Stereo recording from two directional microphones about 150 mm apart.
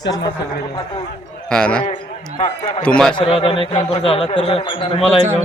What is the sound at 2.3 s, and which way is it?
Speech, 50° left (ahead or behind).